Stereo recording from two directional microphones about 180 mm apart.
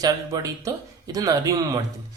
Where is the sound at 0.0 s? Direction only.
20° right (ahead or behind).